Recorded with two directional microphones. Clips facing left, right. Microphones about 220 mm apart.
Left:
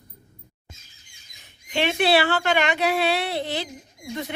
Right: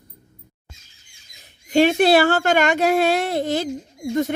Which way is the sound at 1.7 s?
40° right (ahead or behind).